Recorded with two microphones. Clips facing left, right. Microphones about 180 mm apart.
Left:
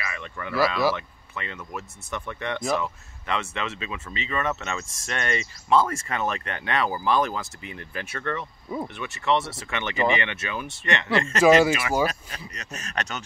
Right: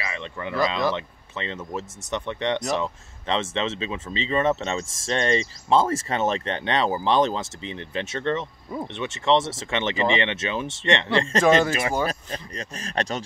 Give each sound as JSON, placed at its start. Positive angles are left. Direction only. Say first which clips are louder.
{"t": 0.0, "sound": "speech", "louder": "right 3 dB", "side_deg": -25}
{"t": 11.4, "sound": "speech", "louder": "left 3 dB", "side_deg": 5}
{"t": 12.1, "sound": "speech", "louder": "right 5 dB", "side_deg": -30}